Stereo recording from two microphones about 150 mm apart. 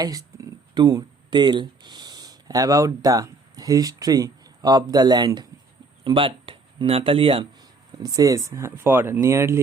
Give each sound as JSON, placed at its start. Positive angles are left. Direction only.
{"t": 0.0, "sound": "speech", "side_deg": -25}
{"t": 7.9, "sound": "speech", "side_deg": -25}